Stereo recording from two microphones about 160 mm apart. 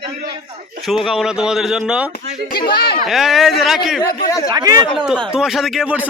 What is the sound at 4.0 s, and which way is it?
Speech, 20° left (ahead or behind).